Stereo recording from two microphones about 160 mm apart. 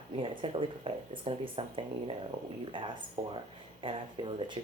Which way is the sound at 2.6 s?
30° right (ahead or behind).